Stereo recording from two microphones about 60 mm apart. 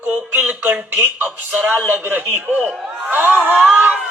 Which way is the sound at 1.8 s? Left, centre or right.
Right.